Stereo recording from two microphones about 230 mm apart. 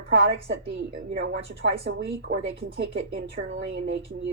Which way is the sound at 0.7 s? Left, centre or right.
Right.